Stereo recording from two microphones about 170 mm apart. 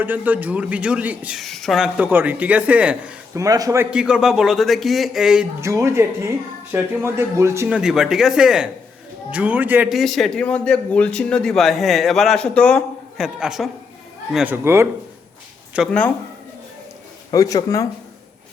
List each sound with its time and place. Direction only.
0.0 s a man's voice: 10° right (ahead or behind)
3.3 s speech: 20° right (ahead or behind)
3.9 s a man's voice: 5° right (ahead or behind)
5.5 s a man's voice: 15° right (ahead or behind)
7.8 s a man's voice: 5° right (ahead or behind)
15.9 s speech: 5° left (ahead or behind)
17.3 s speech: 20° left (ahead or behind)